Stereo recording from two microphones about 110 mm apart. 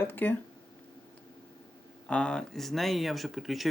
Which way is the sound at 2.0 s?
10° left (ahead or behind).